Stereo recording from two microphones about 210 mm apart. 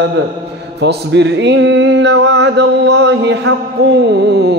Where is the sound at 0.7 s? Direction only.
55° right (ahead or behind).